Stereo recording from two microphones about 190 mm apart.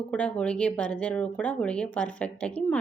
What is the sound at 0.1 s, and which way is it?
A woman's voice, 5° left (ahead or behind).